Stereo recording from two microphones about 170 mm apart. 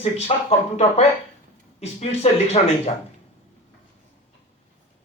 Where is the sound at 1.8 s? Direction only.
40° left (ahead or behind).